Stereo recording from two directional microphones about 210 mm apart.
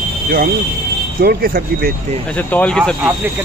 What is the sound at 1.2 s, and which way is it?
Speech, 45° right (ahead or behind).